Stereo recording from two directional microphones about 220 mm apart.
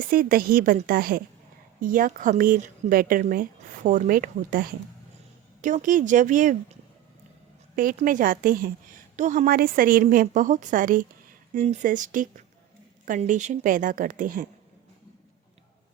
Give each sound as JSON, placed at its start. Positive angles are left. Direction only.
{"t": 0.0, "sound": "a woman's voice", "side_deg": -40}
{"t": 7.8, "sound": "a woman's voice", "side_deg": -40}